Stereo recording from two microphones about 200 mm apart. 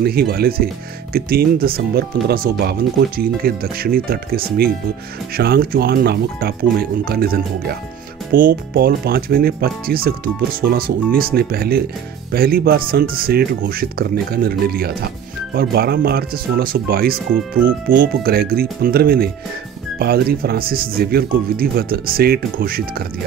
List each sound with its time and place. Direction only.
0.0 s speech: 50° right (ahead or behind)